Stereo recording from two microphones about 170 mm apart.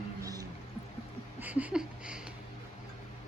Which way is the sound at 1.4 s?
10° right (ahead or behind).